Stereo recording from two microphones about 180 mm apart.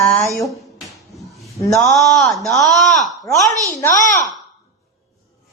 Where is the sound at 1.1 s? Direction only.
Centre (ahead or behind).